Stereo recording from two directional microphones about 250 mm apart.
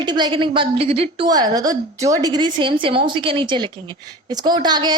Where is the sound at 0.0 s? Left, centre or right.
Centre.